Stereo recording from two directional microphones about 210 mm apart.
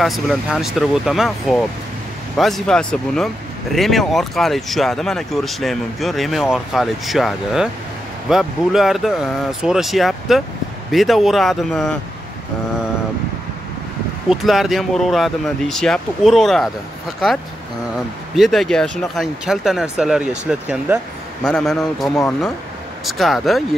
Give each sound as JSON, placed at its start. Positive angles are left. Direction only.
{"t": 0.0, "sound": "speech", "side_deg": 0}
{"t": 14.3, "sound": "speech", "side_deg": 0}
{"t": 18.3, "sound": "speech", "side_deg": 0}